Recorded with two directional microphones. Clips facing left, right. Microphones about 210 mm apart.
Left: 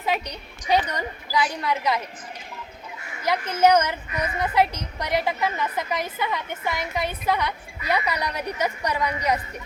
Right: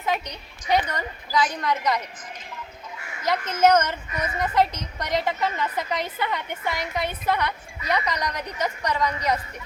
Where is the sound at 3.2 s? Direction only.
10° left (ahead or behind).